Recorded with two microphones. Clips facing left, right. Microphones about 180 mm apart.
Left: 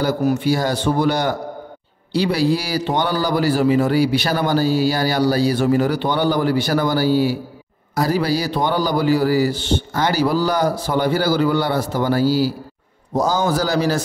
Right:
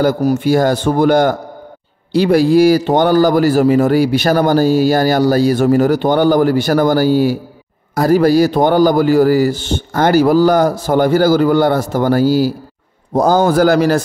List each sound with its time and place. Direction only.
0.0 s a man's voice: 45° right (ahead or behind)